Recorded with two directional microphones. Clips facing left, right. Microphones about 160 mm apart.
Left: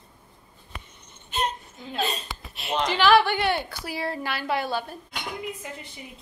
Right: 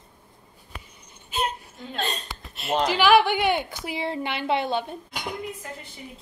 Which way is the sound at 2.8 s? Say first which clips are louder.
Right 1 dB; 10° right (ahead or behind).